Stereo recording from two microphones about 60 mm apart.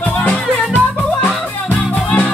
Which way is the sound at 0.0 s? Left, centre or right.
Left.